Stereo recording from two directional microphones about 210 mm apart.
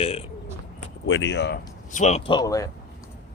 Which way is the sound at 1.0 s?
60° left (ahead or behind).